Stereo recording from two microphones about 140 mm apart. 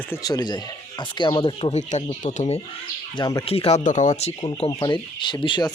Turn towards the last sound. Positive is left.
turn(degrees=30)  # may be behind; listen again after turning